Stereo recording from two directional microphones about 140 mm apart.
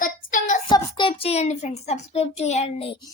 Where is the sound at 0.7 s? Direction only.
35° left (ahead or behind).